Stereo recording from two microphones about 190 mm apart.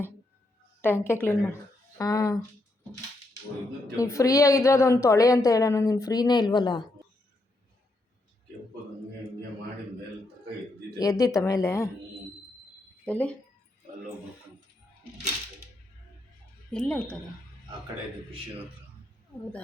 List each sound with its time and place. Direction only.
0.8 s a woman's voice: 10° left (ahead or behind)
3.8 s a woman's voice: 15° left (ahead or behind)
11.0 s a woman's voice: 20° left (ahead or behind)
13.1 s speech: 10° left (ahead or behind)
16.7 s a woman's voice: 5° left (ahead or behind)